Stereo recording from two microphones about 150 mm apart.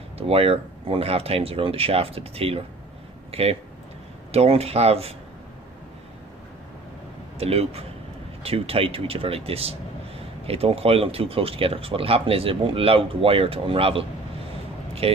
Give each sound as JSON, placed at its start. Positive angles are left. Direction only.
{"t": 0.3, "sound": "speech", "side_deg": -40}
{"t": 7.3, "sound": "speech", "side_deg": -40}